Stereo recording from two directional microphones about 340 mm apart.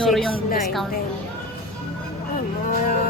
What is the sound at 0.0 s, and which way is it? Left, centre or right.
Music, centre.